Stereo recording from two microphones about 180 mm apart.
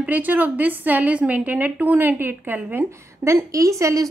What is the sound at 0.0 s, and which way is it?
A woman's voice, 10° right (ahead or behind).